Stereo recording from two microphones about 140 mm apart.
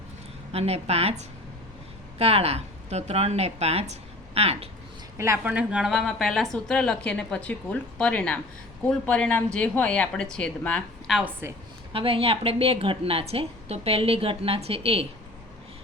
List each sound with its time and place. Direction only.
0.5 s a woman's voice: 50° right (ahead or behind)
5.1 s a woman's voice: 20° right (ahead or behind); by 11.3 s centre (ahead or behind)
11.9 s a woman's voice: 40° right (ahead or behind)